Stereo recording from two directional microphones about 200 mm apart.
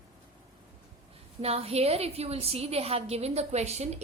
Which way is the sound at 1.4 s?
30° right (ahead or behind).